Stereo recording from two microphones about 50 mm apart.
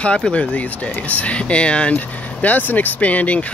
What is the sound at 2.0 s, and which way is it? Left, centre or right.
Speech, left.